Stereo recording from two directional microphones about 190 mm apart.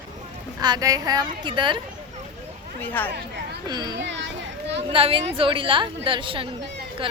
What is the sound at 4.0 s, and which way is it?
Children playing, 70° right (ahead or behind).